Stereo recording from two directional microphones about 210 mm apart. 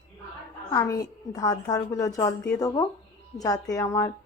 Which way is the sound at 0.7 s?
15° left (ahead or behind).